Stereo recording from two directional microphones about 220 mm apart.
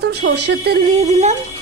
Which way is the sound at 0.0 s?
50° right (ahead or behind).